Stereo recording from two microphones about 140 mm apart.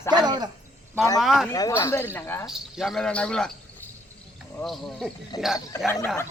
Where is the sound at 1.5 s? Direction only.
25° left (ahead or behind).